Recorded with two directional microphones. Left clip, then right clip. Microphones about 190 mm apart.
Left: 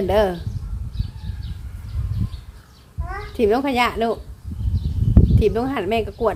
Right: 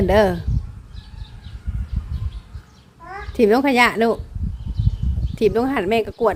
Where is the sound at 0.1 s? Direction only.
20° right (ahead or behind).